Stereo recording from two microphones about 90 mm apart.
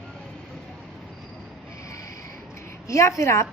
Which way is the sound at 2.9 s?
35° left (ahead or behind).